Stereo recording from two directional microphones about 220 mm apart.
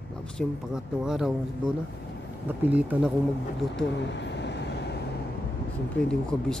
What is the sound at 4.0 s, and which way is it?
Vehicle, 55° left (ahead or behind).